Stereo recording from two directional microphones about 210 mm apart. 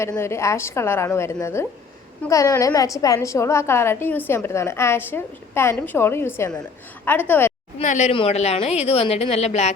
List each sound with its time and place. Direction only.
0.0 s a woman's voice: 10° left (ahead or behind)
7.8 s a woman's voice: 35° left (ahead or behind)